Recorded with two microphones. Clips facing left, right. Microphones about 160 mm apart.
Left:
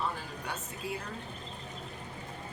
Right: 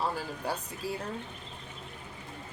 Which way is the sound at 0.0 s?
35° right (ahead or behind).